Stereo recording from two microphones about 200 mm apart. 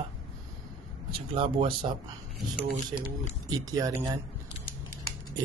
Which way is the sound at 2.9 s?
20° right (ahead or behind).